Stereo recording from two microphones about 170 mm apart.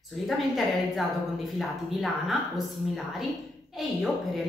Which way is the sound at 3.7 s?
Centre (ahead or behind).